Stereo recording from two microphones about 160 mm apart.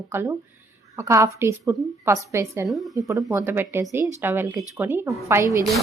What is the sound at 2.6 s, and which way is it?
Speech, centre (ahead or behind).